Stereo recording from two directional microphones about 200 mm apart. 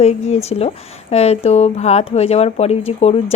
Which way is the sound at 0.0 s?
35° left (ahead or behind).